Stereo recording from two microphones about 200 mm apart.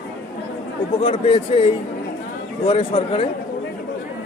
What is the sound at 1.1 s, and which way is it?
Speech, 25° left (ahead or behind).